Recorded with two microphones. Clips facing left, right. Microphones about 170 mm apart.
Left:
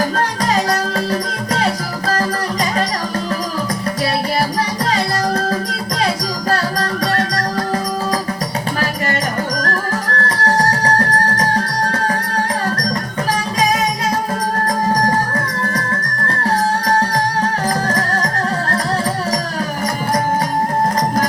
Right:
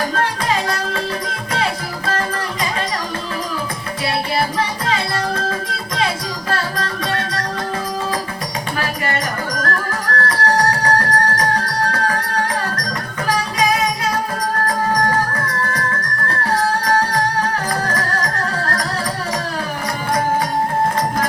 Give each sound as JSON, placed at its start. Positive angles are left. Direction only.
{"t": 0.1, "sound": "music", "side_deg": 35}
{"t": 4.9, "sound": "music", "side_deg": 40}
{"t": 9.6, "sound": "music", "side_deg": 35}
{"t": 17.8, "sound": "music", "side_deg": 35}